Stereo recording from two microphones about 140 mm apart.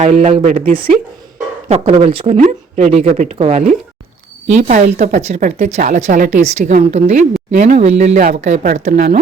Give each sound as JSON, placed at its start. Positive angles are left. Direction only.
{"t": 0.0, "sound": "speech", "side_deg": -55}
{"t": 0.7, "sound": "a woman's voice", "side_deg": -40}
{"t": 2.4, "sound": "a woman's voice", "side_deg": -55}